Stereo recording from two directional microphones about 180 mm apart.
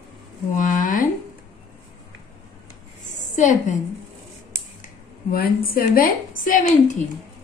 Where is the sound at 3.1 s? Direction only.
40° left (ahead or behind).